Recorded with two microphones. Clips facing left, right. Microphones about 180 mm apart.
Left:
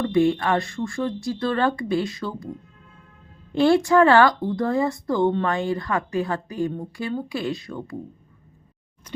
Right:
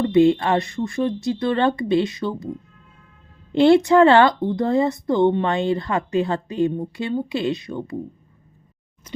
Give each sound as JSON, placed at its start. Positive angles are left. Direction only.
{"t": 0.0, "sound": "speech", "side_deg": -20}
{"t": 3.5, "sound": "speech", "side_deg": -25}